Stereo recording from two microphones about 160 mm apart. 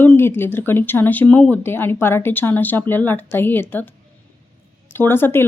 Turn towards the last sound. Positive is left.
turn(degrees=15)  # may be behind; listen again after turning